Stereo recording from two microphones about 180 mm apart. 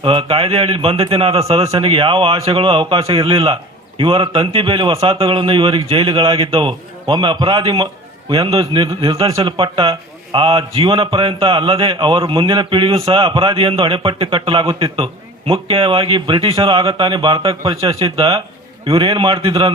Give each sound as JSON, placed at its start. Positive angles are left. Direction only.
{"t": 0.0, "sound": "a man's voice", "side_deg": -30}